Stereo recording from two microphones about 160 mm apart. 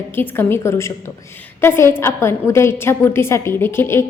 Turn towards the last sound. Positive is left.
turn(degrees=15)  # may be behind; listen again after turning